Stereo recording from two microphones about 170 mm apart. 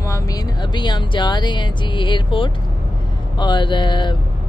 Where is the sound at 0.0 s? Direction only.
20° left (ahead or behind).